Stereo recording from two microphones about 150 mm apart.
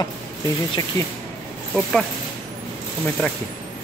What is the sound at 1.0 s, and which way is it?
Speech, 20° left (ahead or behind).